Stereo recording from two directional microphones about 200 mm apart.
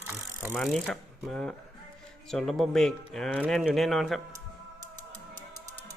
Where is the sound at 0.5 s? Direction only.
Centre (ahead or behind).